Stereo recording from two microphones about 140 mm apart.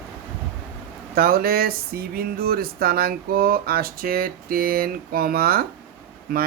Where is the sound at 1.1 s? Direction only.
90° right.